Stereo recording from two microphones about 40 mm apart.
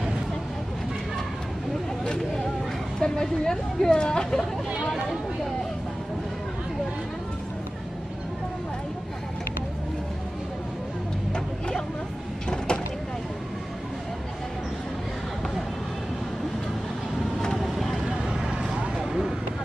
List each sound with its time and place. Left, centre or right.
2.0 s a sound: centre
3.0 s speech: centre
12.4 s vehicle: left
17.6 s vehicle: centre
18.0 s vehicle: centre
18.9 s a sound: centre